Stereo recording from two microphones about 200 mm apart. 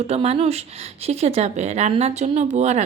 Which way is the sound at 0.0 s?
30° right (ahead or behind).